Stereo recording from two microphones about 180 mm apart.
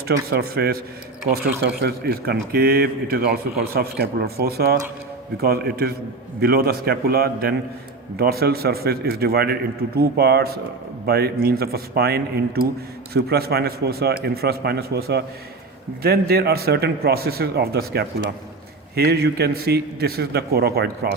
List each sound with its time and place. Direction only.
0.1 s speech: 60° right (ahead or behind)